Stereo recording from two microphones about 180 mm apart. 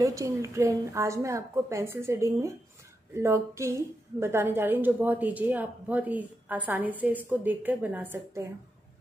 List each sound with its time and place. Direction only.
0.0 s a woman's voice: 15° right (ahead or behind)